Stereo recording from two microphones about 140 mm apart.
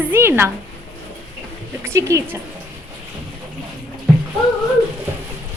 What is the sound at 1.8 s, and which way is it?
Speech, 20° right (ahead or behind).